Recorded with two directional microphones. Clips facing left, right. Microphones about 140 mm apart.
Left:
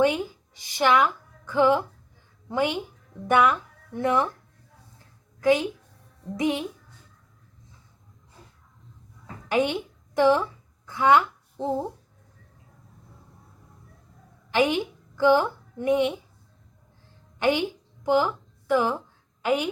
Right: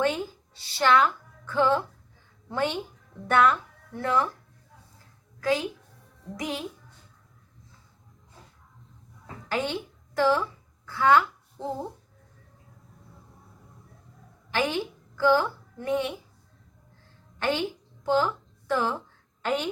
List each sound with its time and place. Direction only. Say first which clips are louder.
0.0 s a woman's voice: left 4 dB; 15° left (ahead or behind)
5.4 s a woman's voice: left 5 dB; 20° left (ahead or behind)
9.5 s speech: left 5 dB; 15° left (ahead or behind)
10.8 s a sound: left 1 dB; 20° left (ahead or behind)
14.5 s a woman's voice: left 5 dB; 15° left (ahead or behind)
17.4 s a woman's voice: left 4 dB; 15° left (ahead or behind)
18.7 s a sound: left 4 dB; 15° left (ahead or behind)